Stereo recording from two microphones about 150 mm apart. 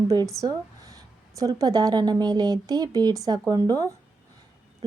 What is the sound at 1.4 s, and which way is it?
Speech, 20° right (ahead or behind).